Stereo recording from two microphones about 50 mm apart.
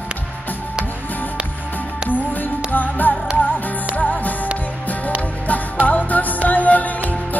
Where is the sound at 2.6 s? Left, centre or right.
Left.